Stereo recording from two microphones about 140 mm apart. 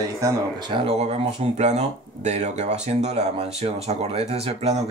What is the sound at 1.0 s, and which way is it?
Speech, 50° right (ahead or behind).